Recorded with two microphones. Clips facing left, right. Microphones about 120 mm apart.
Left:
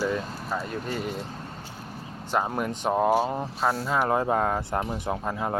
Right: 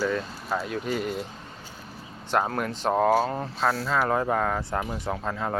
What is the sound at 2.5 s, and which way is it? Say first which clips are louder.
Speech: even; 15° left (ahead or behind).